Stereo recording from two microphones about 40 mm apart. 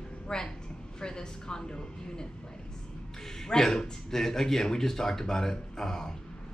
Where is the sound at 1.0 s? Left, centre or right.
Centre.